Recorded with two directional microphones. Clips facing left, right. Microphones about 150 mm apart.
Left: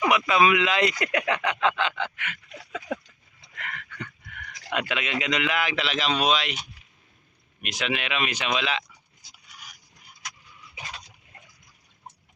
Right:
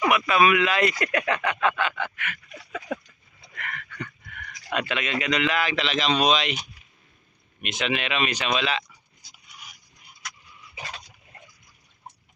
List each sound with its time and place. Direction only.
0.1 s speech: 20° left (ahead or behind)
3.5 s a sound: 15° left (ahead or behind)
4.7 s a man's voice: 15° left (ahead or behind)
7.6 s a man's voice: centre (ahead or behind)